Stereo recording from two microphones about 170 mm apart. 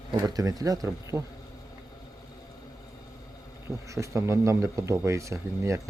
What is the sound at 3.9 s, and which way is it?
Speech, 15° right (ahead or behind).